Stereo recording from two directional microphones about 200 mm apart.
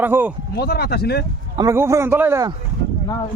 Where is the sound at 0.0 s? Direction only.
10° right (ahead or behind).